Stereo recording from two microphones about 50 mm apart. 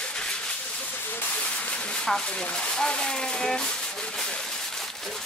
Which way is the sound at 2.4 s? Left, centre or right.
Centre.